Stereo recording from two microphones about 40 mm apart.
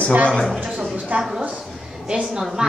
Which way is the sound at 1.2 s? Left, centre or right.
Centre.